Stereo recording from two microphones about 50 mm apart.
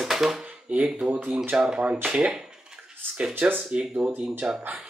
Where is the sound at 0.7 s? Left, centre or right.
Right.